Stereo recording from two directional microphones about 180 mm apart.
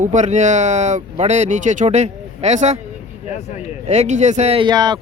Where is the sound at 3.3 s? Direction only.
40° left (ahead or behind).